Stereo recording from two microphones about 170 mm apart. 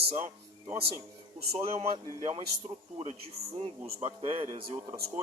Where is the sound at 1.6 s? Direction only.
35° right (ahead or behind).